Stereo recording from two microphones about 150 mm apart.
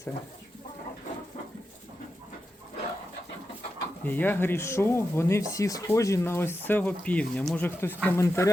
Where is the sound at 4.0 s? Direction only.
10° left (ahead or behind).